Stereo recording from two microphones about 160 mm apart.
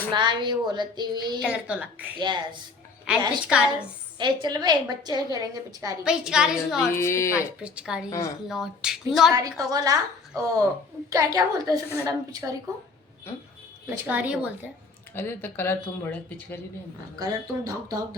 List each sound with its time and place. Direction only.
0.1 s a woman's voice: 30° right (ahead or behind)
1.5 s a woman's voice: 5° right (ahead or behind)
2.1 s a woman's voice: 30° right (ahead or behind)
3.1 s a woman's voice: 5° right (ahead or behind)
4.2 s a woman's voice: 25° right (ahead or behind)
6.1 s speech: 5° right (ahead or behind)
6.9 s speech: 15° left (ahead or behind)
7.6 s speech: 5° right (ahead or behind)
9.3 s a woman's voice: 20° right (ahead or behind)
13.9 s a woman's voice: 10° right (ahead or behind)
15.1 s speech: 15° left (ahead or behind)
17.2 s a woman's voice: 20° right (ahead or behind)